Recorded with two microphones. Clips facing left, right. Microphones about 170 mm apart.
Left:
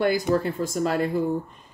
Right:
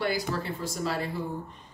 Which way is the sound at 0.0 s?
50° left (ahead or behind).